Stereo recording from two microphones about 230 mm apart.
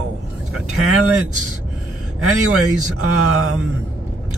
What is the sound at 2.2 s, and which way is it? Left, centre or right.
A man's voice, right.